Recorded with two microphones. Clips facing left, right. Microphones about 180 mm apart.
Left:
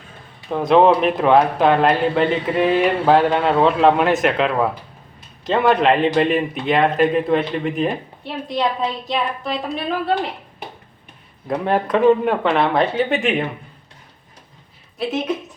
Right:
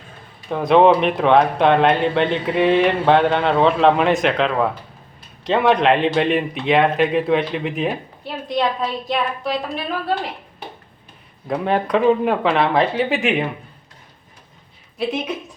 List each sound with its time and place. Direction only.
0.4 s speech: centre (ahead or behind)
11.4 s speech: centre (ahead or behind)
14.9 s speech: centre (ahead or behind)